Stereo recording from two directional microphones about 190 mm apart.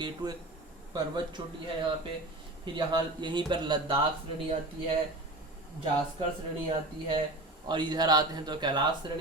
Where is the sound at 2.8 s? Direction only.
25° right (ahead or behind).